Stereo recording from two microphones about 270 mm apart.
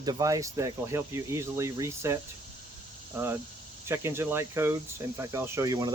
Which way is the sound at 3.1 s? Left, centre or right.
Centre.